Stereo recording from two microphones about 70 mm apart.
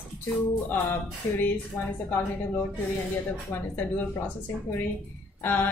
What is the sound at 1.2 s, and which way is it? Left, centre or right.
Speech, left.